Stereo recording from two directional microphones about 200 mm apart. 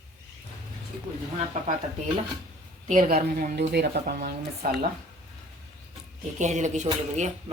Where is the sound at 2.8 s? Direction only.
40° right (ahead or behind).